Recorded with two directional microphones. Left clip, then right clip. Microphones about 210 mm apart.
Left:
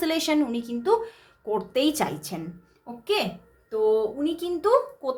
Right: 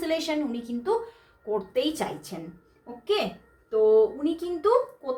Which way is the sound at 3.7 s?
30° left (ahead or behind).